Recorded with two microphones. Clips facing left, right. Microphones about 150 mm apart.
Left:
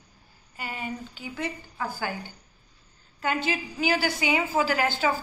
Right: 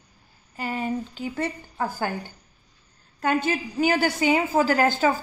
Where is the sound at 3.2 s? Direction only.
45° right (ahead or behind).